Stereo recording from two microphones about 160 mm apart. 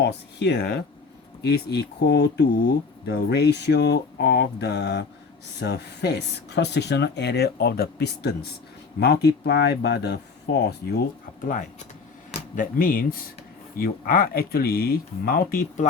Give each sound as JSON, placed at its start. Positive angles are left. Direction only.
{"t": 0.0, "sound": "speech", "side_deg": 90}
{"t": 12.3, "sound": "speech", "side_deg": 60}